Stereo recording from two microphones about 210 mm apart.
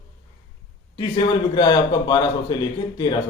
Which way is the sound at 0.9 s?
20° left (ahead or behind).